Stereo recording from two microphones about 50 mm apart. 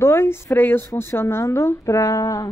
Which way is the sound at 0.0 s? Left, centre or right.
Left.